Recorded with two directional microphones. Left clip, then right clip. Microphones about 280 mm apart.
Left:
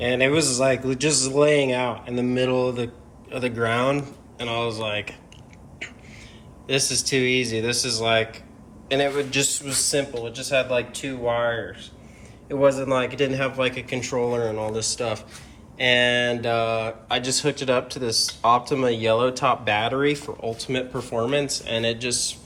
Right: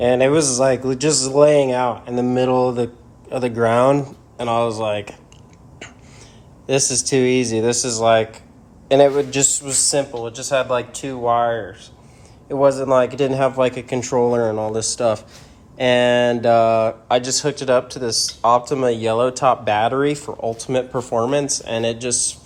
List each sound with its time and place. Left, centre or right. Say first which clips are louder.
0.0 s speech: right 5 dB; centre
6.7 s speech: right 4 dB; centre
16.4 s speech: right 9 dB; centre